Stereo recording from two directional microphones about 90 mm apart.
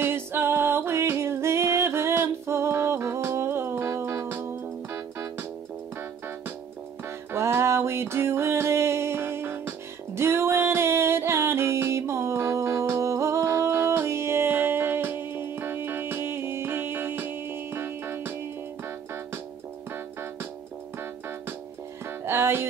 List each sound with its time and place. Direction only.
0.0 s music: 25° right (ahead or behind)
7.3 s music: 30° right (ahead or behind)
22.2 s music: 25° right (ahead or behind)